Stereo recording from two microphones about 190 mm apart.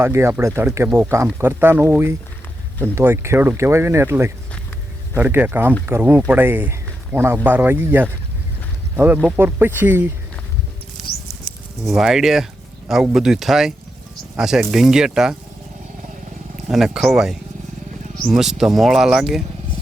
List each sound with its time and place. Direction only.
0.0 s speech: 15° right (ahead or behind)
9.2 s speech: 10° right (ahead or behind)
11.0 s patter: 5° right (ahead or behind)
11.8 s speech: centre (ahead or behind)
16.6 s speech: 5° right (ahead or behind)